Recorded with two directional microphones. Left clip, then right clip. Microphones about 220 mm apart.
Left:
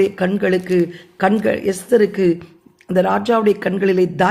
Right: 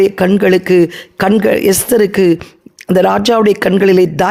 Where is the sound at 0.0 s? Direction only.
40° right (ahead or behind).